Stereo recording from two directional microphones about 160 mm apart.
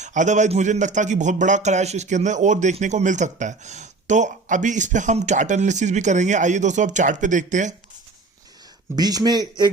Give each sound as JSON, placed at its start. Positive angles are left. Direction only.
{"t": 0.0, "sound": "speech", "side_deg": -50}
{"t": 9.0, "sound": "speech", "side_deg": -25}